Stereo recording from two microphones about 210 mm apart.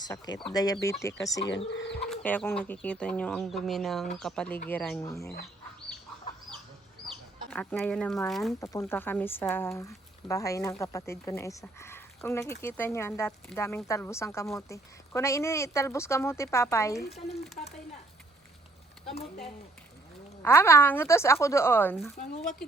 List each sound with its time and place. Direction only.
0.5 s speech: 20° left (ahead or behind)
1.7 s speech: 55° left (ahead or behind)
2.0 s speech: 5° left (ahead or behind)
7.5 s speech: 5° left (ahead or behind)
8.6 s speech: 15° left (ahead or behind)
17.6 s speech: 40° left (ahead or behind)
19.0 s speech: 30° left (ahead or behind)
20.4 s speech: 10° left (ahead or behind)
22.1 s speech: 45° left (ahead or behind)